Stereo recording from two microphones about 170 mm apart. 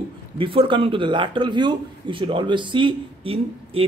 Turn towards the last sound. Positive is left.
turn(degrees=-35)  # may be behind; listen again after turning